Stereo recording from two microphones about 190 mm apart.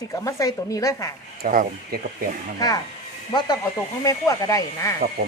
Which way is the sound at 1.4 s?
50° right (ahead or behind).